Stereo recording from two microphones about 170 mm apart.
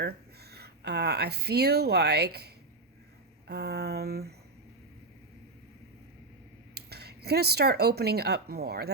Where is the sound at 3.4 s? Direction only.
75° right (ahead or behind).